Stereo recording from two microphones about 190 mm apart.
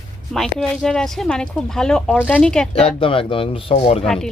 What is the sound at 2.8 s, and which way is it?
Speech, 30° left (ahead or behind).